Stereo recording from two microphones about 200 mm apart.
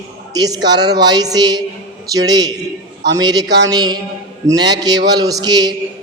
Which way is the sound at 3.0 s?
60° right (ahead or behind).